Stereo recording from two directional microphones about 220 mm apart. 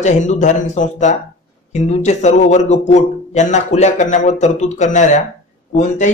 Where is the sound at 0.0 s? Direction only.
35° left (ahead or behind).